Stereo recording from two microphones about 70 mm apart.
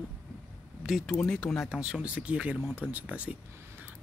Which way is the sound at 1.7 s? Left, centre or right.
Centre.